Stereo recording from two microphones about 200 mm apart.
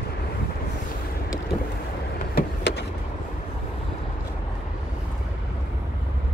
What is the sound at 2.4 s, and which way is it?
Vehicle, 55° left (ahead or behind).